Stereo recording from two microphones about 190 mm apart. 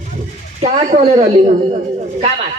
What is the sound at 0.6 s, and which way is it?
Speech, 40° right (ahead or behind).